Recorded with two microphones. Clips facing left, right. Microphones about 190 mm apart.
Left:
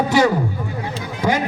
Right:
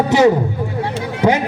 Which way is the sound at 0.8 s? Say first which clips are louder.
Right 5 dB; 70° right (ahead or behind).